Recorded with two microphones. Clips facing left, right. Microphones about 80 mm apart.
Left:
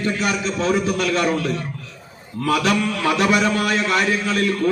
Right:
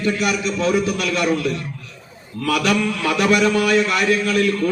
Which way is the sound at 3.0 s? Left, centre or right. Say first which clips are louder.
Right 1 dB; left.